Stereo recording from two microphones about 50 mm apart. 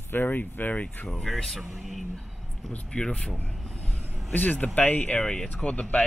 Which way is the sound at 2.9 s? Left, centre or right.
Left.